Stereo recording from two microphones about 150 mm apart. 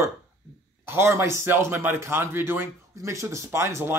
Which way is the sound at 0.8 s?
15° right (ahead or behind).